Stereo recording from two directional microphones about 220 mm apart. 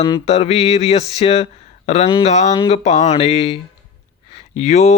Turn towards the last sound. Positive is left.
turn(degrees=30)  # may be behind; listen again after turning